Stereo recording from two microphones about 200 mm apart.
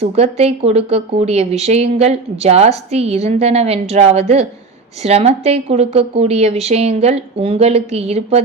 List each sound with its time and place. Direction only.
0.0 s a woman's voice: 30° right (ahead or behind)